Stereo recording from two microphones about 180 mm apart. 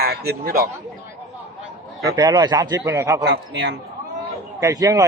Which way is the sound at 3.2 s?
70° right (ahead or behind).